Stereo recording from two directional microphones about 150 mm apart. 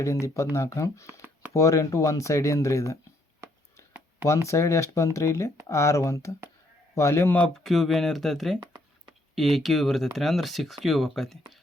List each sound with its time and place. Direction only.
0.0 s speech: 20° left (ahead or behind)
4.4 s speech: 20° left (ahead or behind); by 11.3 s centre (ahead or behind)